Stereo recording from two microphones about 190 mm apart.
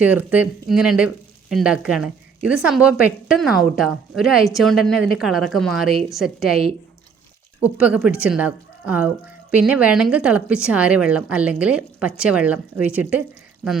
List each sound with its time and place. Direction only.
0.0 s a woman's voice: 10° right (ahead or behind)